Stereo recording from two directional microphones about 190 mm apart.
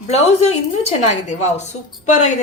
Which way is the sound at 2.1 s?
40° left (ahead or behind).